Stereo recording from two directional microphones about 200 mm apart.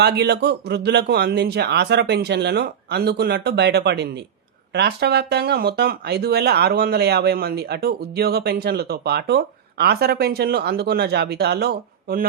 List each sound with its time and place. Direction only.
0.0 s a man's voice: 55° right (ahead or behind)